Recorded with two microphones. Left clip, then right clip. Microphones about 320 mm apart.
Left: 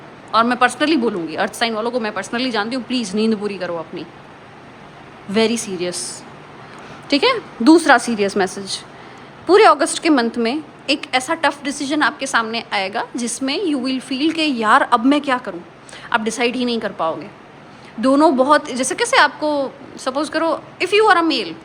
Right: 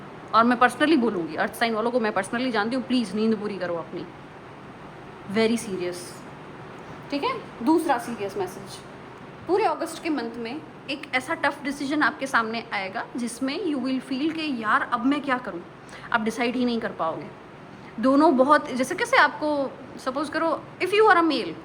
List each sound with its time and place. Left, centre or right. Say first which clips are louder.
0.3 s a woman's voice: left 4 dB; centre
5.3 s a woman's voice: left 6 dB; centre
7.2 s a woman's voice: left 10 dB; left
9.6 s a woman's voice: left 14 dB; left; by 21.5 s centre